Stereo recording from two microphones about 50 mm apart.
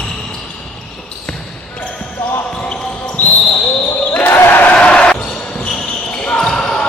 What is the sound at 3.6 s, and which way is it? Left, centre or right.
Basketball bounce, centre.